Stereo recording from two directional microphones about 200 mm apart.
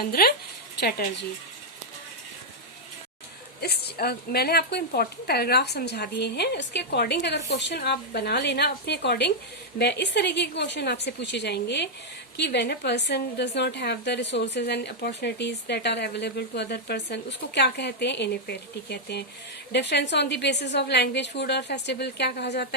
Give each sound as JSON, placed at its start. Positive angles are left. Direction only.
{"t": 0.1, "sound": "speech", "side_deg": 50}
{"t": 3.6, "sound": "a woman's voice", "side_deg": 55}